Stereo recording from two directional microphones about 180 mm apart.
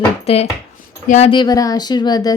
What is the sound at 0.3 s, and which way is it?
Speech, 35° left (ahead or behind).